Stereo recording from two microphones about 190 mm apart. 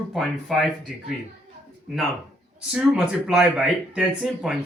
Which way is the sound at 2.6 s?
5° right (ahead or behind).